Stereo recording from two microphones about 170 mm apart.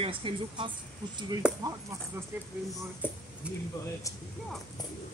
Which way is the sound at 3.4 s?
5° right (ahead or behind).